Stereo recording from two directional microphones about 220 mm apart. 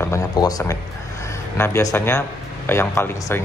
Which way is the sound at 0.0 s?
15° left (ahead or behind).